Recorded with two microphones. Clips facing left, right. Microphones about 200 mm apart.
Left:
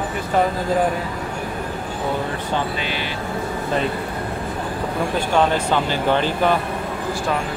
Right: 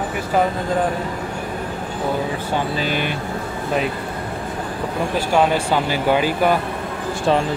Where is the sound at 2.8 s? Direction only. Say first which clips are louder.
Right 4 dB; 50° right (ahead or behind).